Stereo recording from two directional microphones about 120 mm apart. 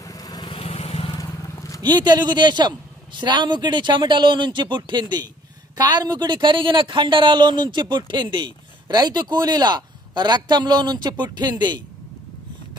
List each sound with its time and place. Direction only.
0.0 s vehicle: 30° left (ahead or behind)
0.5 s vehicle: 55° left (ahead or behind)
1.1 s vehicle: 30° left (ahead or behind)
2.0 s a woman's voice: 35° right (ahead or behind)